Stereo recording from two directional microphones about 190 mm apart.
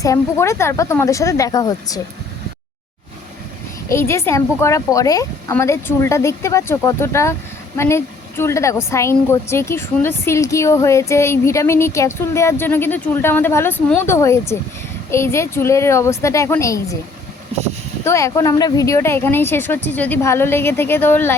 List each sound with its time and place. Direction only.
0.0 s a woman's voice: 15° left (ahead or behind)
3.8 s a woman's voice: 15° left (ahead or behind)
18.0 s a woman's voice: 15° left (ahead or behind)